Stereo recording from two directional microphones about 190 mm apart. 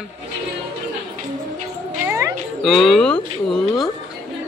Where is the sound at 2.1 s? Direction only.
15° right (ahead or behind).